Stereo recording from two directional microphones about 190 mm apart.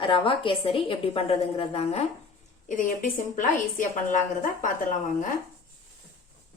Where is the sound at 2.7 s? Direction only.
45° left (ahead or behind).